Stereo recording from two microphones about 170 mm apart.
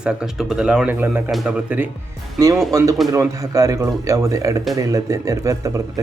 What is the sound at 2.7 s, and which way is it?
Speech, 20° right (ahead or behind).